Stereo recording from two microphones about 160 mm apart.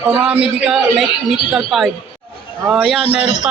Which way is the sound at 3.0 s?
40° left (ahead or behind).